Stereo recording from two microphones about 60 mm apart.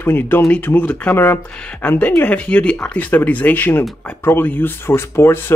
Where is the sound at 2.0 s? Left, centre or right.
Left.